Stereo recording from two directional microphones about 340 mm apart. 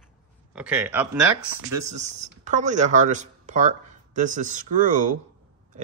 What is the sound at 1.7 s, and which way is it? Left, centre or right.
Speech, centre.